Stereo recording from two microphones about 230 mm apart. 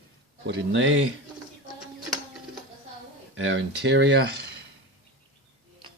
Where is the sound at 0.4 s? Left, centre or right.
Right.